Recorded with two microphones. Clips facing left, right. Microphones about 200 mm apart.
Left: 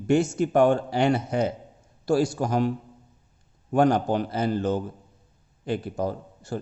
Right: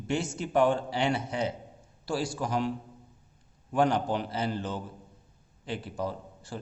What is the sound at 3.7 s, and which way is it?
A man's voice, 45° left (ahead or behind).